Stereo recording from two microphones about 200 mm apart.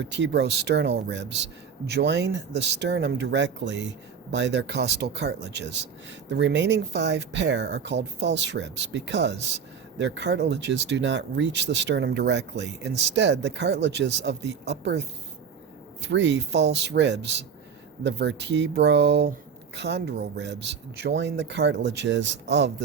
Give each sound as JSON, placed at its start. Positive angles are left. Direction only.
{"t": 0.0, "sound": "speech", "side_deg": -60}